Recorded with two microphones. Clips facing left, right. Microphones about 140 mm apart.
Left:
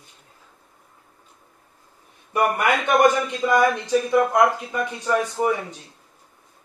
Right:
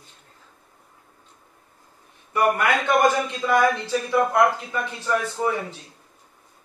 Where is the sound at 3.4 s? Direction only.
15° left (ahead or behind).